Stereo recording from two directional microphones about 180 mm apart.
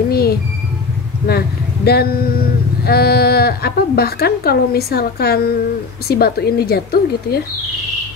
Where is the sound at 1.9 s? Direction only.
60° left (ahead or behind).